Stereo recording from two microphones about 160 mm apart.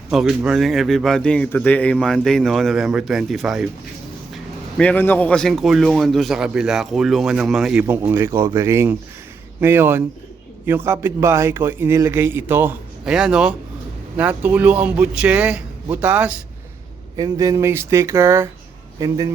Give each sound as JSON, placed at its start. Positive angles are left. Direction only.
{"t": 0.1, "sound": "speech", "side_deg": -5}
{"t": 4.8, "sound": "speech", "side_deg": 10}
{"t": 17.2, "sound": "speech", "side_deg": -20}